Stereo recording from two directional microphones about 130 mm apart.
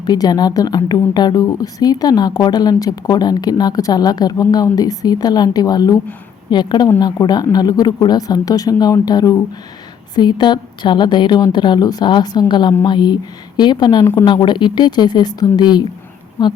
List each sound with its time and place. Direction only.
0.0 s speech: 30° left (ahead or behind)
14.0 s a woman's voice: 20° left (ahead or behind)
14.3 s speech: 35° left (ahead or behind)